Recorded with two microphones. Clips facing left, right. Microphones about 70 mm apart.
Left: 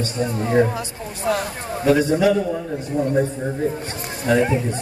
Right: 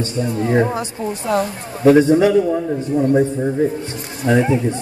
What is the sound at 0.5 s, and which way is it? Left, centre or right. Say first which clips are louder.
Speech: right 1 dB; right.